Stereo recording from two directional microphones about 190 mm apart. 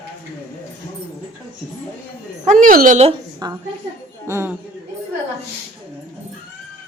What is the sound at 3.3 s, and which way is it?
A woman's voice, 20° right (ahead or behind).